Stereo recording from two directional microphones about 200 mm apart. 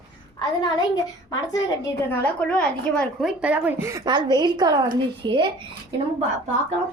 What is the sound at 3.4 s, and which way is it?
A woman's voice, 5° right (ahead or behind).